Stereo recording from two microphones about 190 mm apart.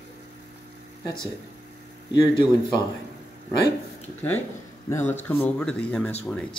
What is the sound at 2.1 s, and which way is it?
Speech, 20° left (ahead or behind).